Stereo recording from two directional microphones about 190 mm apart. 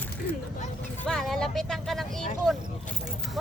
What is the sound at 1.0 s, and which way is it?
Speech, centre (ahead or behind).